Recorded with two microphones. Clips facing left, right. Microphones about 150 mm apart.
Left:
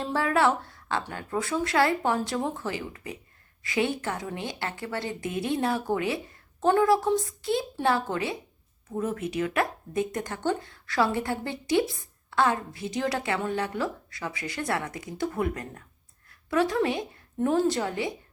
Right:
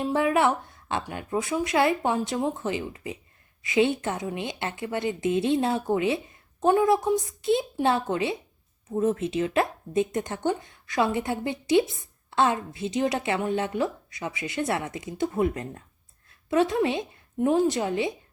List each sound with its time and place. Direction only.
0.0 s a woman's voice: 20° right (ahead or behind)